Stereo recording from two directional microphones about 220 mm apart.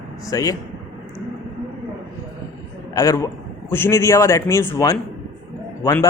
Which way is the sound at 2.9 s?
15° left (ahead or behind).